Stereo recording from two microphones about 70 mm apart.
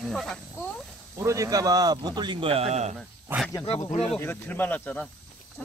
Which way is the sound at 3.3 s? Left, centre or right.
Right.